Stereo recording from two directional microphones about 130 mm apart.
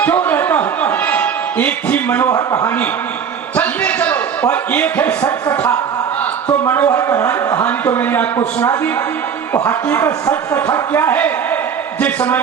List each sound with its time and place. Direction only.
0.0 s music: 15° left (ahead or behind)
2.3 s a man's voice: 25° left (ahead or behind)
3.5 s a man's voice: 10° left (ahead or behind)
6.7 s a man's voice: 15° left (ahead or behind)